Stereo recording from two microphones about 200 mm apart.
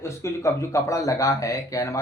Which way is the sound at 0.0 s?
15° left (ahead or behind).